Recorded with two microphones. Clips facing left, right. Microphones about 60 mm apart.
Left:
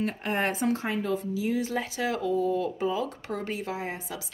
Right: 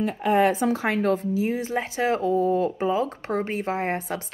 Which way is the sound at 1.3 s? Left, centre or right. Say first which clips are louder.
Right 3 dB; right.